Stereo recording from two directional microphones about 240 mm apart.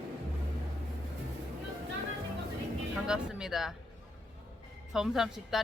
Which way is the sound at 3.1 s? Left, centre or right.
Centre.